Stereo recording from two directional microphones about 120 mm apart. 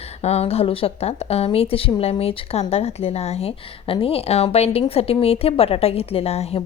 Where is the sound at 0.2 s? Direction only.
60° left (ahead or behind).